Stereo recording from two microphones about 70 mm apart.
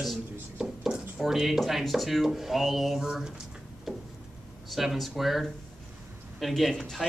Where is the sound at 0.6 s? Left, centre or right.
Centre.